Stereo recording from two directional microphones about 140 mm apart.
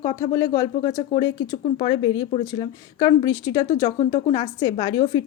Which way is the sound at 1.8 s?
35° left (ahead or behind).